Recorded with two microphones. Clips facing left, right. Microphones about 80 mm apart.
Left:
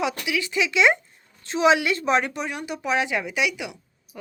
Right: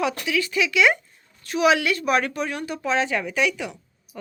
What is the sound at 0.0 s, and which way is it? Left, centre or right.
A woman's voice, centre.